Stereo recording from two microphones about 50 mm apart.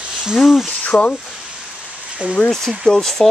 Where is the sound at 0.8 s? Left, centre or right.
Left.